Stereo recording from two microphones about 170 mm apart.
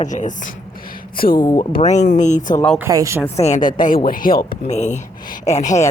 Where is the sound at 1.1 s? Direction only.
60° left (ahead or behind).